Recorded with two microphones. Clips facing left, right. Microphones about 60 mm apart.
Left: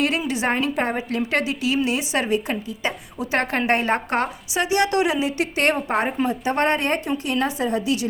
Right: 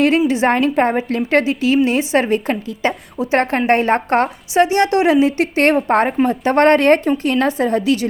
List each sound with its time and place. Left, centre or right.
0.3 s a woman's voice: right
5.9 s a woman's voice: right